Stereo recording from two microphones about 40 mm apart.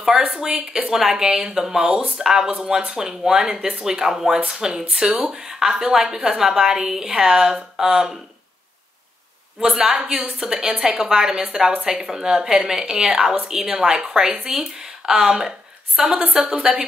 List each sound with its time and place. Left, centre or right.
0.4 s a woman's voice: centre
3.8 s a woman's voice: centre
9.8 s a woman's voice: centre